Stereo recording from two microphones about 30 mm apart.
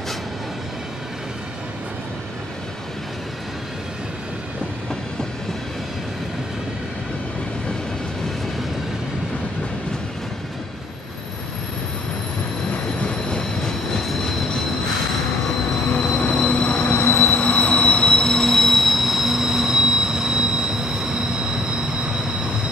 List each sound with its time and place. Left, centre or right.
13.4 s train: left
15.9 s train: left
16.8 s train: left
18.3 s train: centre; by 21.3 s right